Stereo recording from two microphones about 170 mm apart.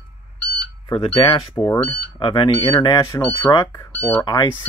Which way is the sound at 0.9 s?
30° left (ahead or behind).